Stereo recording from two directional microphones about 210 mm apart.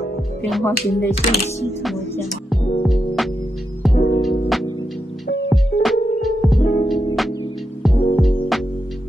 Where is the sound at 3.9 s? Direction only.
50° left (ahead or behind).